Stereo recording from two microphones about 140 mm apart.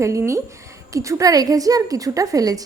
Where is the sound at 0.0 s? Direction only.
20° right (ahead or behind).